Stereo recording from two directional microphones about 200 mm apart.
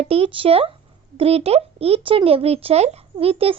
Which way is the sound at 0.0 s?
30° right (ahead or behind).